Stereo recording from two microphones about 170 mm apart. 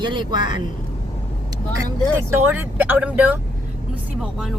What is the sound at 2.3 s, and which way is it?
Speech, 10° right (ahead or behind).